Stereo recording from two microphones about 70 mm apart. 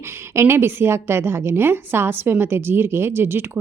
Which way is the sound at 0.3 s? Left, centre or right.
Right.